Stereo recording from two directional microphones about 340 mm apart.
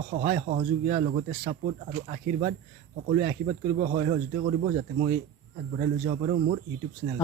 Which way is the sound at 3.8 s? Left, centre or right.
Right.